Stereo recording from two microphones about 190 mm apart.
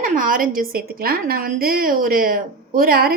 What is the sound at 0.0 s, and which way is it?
A woman's voice, 45° right (ahead or behind).